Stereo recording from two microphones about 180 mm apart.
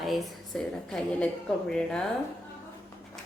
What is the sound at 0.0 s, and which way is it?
A woman's voice, centre (ahead or behind).